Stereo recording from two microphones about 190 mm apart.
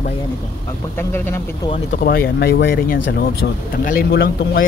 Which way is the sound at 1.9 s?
50° left (ahead or behind).